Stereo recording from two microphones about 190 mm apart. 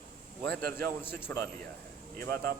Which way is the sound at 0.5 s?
50° right (ahead or behind).